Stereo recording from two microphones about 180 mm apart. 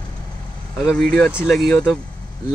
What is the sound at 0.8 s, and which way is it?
Speech, 5° left (ahead or behind).